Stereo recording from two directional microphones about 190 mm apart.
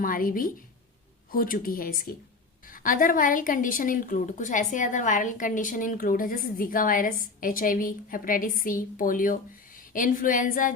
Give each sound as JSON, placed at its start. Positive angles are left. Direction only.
{"t": 0.0, "sound": "a woman's voice", "side_deg": 45}